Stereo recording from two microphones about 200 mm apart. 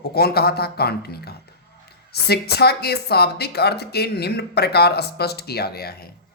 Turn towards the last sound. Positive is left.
turn(degrees=50)  # may be behind; listen again after turning